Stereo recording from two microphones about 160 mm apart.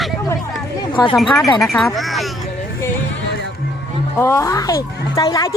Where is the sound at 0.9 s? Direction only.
30° left (ahead or behind).